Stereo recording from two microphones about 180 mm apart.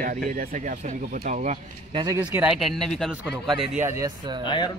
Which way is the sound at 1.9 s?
25° right (ahead or behind).